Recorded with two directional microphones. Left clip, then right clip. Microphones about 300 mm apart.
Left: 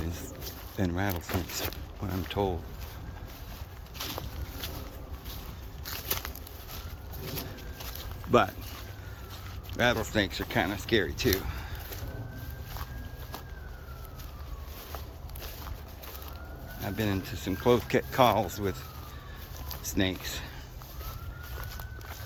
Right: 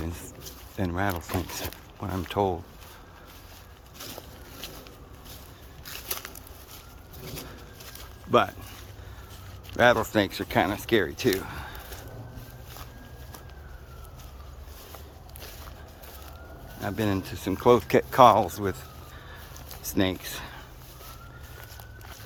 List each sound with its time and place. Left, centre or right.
0.0 s a sound: centre
0.8 s speech: centre
5.8 s a sound: centre
8.3 s speech: centre
9.7 s speech: centre
16.8 s speech: centre
19.8 s speech: centre